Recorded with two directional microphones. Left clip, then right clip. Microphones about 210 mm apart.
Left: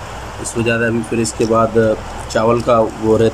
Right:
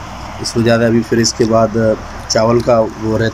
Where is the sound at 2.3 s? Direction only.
5° left (ahead or behind).